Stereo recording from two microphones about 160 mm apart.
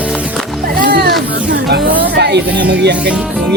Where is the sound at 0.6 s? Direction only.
70° right (ahead or behind).